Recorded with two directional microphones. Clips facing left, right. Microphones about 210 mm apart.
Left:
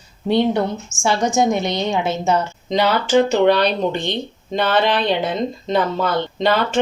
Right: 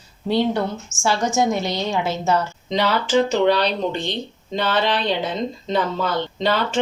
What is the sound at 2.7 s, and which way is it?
Speech, 50° left (ahead or behind).